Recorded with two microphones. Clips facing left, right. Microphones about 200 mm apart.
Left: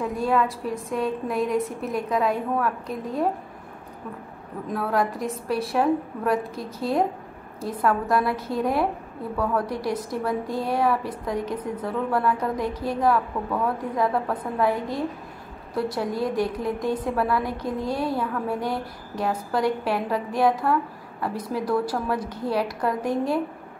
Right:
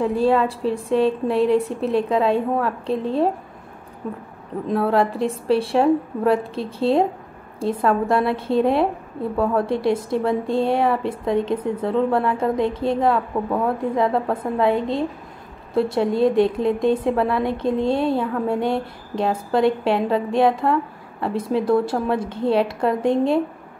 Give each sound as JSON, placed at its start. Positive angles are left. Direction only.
{"t": 0.0, "sound": "a woman's voice", "side_deg": -30}
{"t": 4.6, "sound": "a woman's voice", "side_deg": -30}